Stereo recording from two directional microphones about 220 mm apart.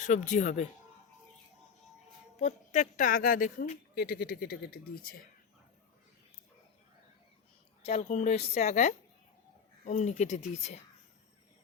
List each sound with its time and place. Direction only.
0.0 s a woman's voice: 35° left (ahead or behind)
2.4 s speech: 35° left (ahead or behind)
7.8 s a woman's voice: 30° left (ahead or behind)